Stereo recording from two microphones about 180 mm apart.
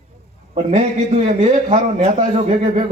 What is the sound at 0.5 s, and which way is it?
A man's voice, 35° right (ahead or behind).